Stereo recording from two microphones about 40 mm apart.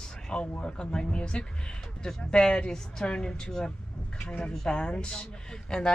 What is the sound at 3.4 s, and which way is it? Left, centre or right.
Speech, centre.